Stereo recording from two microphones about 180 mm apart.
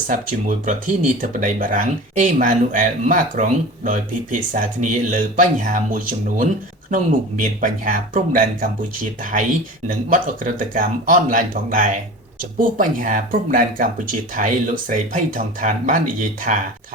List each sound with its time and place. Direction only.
0.1 s speech: 45° right (ahead or behind)